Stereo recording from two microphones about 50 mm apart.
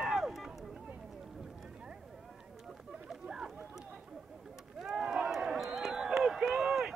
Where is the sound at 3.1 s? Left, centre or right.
Centre.